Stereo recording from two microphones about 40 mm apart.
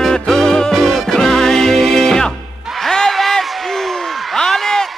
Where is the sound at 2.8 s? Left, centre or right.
Centre.